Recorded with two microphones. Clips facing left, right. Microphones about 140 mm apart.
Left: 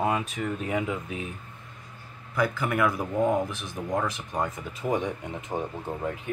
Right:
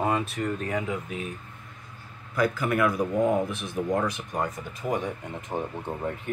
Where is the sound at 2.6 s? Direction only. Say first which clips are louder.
Right 2 dB; centre (ahead or behind).